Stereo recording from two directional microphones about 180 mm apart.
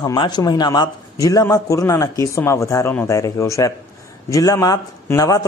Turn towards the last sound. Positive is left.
turn(degrees=20)  # may be behind; listen again after turning